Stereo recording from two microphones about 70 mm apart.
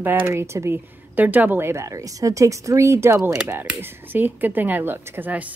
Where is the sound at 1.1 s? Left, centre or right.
Right.